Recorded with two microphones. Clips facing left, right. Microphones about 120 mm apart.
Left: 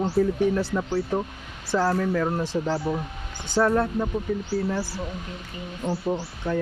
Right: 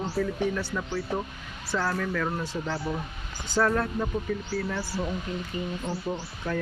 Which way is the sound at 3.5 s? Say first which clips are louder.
Left 4 dB; 20° left (ahead or behind).